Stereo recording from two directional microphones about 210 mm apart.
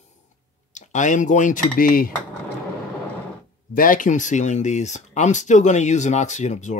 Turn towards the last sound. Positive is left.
turn(degrees=35)  # may be behind; listen again after turning